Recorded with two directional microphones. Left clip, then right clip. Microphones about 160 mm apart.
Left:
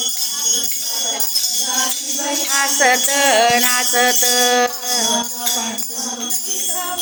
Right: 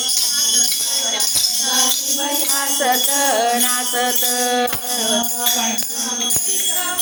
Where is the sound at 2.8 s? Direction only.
20° left (ahead or behind).